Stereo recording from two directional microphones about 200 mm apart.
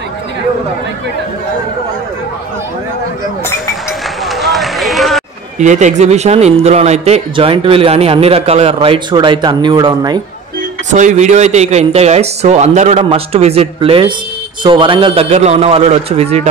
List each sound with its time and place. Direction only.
4.3 s run: centre (ahead or behind)
5.6 s a man's voice: 35° right (ahead or behind); by 10.2 s 20° right (ahead or behind)
10.9 s a man's voice: 35° right (ahead or behind)